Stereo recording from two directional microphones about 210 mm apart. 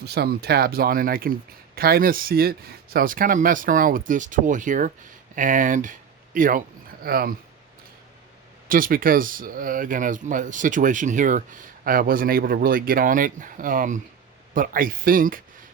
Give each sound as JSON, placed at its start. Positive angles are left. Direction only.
{"t": 0.0, "sound": "speech", "side_deg": -50}
{"t": 8.7, "sound": "speech", "side_deg": -40}